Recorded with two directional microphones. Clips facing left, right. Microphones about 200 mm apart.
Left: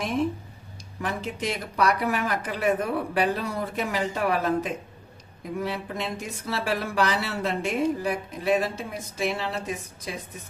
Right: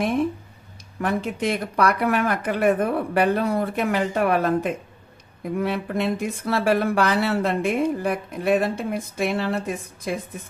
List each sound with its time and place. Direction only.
1.0 s speech: 55° right (ahead or behind)